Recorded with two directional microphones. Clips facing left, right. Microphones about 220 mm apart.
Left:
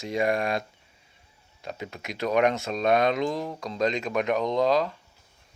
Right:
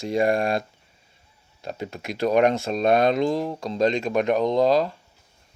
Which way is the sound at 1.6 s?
35° right (ahead or behind).